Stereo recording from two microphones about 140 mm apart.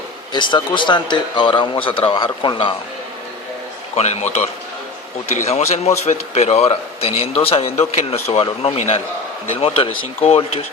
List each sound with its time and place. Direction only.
0.3 s speech: 35° left (ahead or behind)
3.9 s speech: 50° left (ahead or behind)